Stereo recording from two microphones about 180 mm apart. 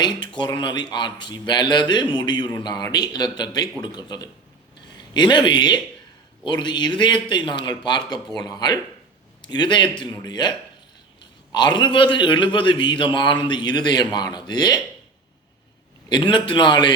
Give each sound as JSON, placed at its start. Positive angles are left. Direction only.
{"t": 0.0, "sound": "a man's voice", "side_deg": 25}
{"t": 16.0, "sound": "a man's voice", "side_deg": 25}